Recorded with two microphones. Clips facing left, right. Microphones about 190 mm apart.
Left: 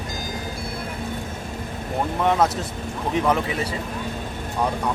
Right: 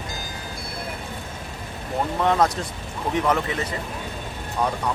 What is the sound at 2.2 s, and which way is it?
Speech, 5° left (ahead or behind).